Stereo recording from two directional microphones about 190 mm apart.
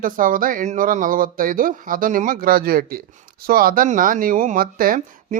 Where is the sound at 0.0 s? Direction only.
45° right (ahead or behind).